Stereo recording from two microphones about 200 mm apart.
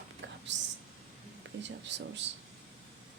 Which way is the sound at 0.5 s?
65° right (ahead or behind).